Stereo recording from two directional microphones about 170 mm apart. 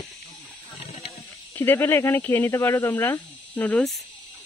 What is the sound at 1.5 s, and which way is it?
Speech, 15° left (ahead or behind).